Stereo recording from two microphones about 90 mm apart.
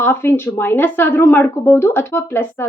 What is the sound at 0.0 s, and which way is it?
Speech, 25° left (ahead or behind).